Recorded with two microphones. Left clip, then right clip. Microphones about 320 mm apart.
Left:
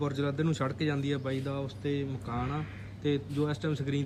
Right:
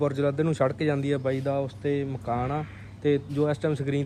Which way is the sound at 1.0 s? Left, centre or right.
Centre.